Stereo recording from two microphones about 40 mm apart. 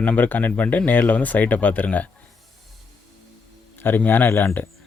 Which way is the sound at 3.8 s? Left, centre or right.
Left.